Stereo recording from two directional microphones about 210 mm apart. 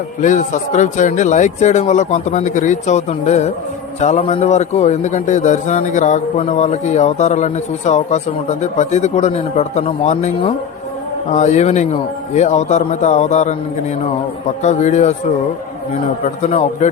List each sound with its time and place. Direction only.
0.2 s speech: 35° left (ahead or behind)
14.6 s speech: 35° left (ahead or behind)
16.2 s speech: 30° left (ahead or behind)